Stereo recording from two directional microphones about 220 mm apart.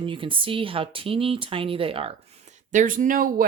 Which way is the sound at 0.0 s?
25° right (ahead or behind).